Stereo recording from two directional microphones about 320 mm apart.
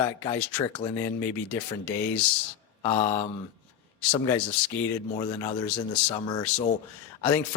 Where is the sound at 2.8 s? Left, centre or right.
Centre.